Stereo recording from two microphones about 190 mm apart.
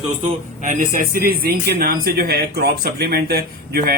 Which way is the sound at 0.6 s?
45° right (ahead or behind).